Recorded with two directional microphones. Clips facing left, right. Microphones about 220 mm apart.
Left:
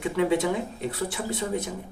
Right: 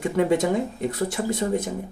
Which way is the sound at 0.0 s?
45° right (ahead or behind).